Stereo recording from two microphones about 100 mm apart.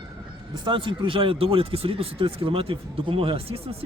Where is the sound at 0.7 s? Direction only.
55° right (ahead or behind).